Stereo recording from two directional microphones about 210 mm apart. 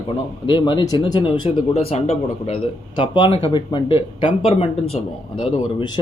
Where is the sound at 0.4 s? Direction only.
20° left (ahead or behind).